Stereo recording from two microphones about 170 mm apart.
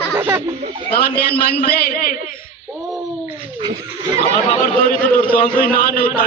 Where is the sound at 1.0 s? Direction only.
60° left (ahead or behind).